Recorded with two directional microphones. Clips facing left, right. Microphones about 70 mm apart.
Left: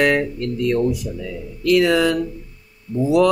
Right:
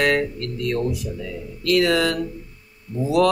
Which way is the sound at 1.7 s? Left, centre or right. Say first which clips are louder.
Left 3 dB; centre.